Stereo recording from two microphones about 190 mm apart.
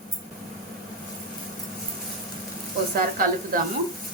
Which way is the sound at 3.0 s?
50° right (ahead or behind).